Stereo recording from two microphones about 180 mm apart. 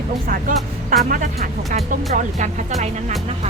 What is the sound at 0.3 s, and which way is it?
Speech, 50° right (ahead or behind).